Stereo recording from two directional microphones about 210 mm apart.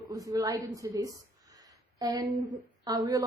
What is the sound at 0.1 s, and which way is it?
Speech, 15° right (ahead or behind).